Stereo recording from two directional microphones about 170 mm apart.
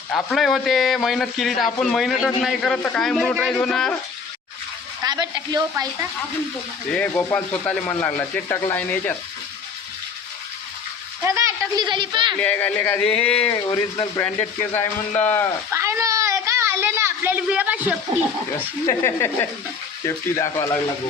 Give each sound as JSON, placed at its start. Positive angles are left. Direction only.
{"t": 0.1, "sound": "a man's voice", "side_deg": 5}
{"t": 5.0, "sound": "a woman's voice", "side_deg": -25}
{"t": 6.9, "sound": "speech", "side_deg": 10}
{"t": 11.2, "sound": "a sound", "side_deg": -15}
{"t": 12.4, "sound": "speech", "side_deg": 10}
{"t": 13.5, "sound": "speech", "side_deg": 25}
{"t": 14.7, "sound": "speech", "side_deg": 10}
{"t": 15.7, "sound": "a sound", "side_deg": -15}
{"t": 18.9, "sound": "speech", "side_deg": 15}